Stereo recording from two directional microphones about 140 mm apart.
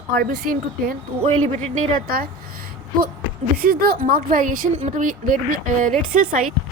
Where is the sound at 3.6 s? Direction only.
90° right; by 5.9 s 70° right (ahead or behind).